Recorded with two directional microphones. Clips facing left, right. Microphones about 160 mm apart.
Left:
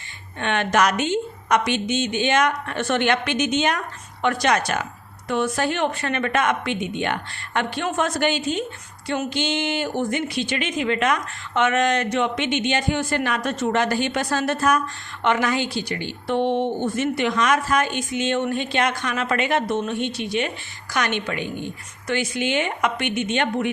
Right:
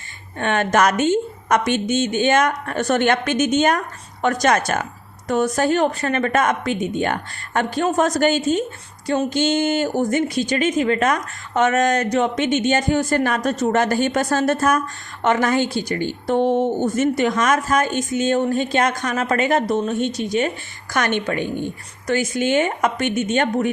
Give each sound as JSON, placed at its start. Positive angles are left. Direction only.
{"t": 0.3, "sound": "a woman's voice", "side_deg": -45}